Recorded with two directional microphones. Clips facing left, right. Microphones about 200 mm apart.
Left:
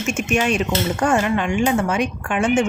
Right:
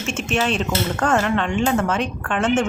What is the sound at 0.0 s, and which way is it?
Speech, 10° left (ahead or behind).